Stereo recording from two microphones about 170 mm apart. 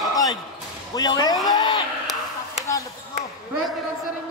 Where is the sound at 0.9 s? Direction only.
25° left (ahead or behind).